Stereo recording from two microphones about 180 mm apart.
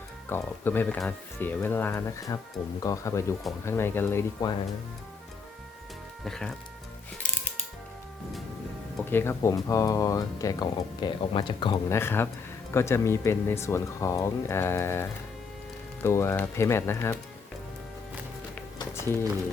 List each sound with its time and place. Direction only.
0.3 s speech: 10° left (ahead or behind)
6.2 s speech: centre (ahead or behind)
9.0 s speech: 15° left (ahead or behind)
11.9 s speech: 15° left (ahead or behind)
18.8 s music: 15° left (ahead or behind)